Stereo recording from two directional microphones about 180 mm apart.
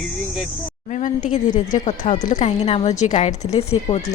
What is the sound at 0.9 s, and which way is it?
A woman's voice, 45° left (ahead or behind).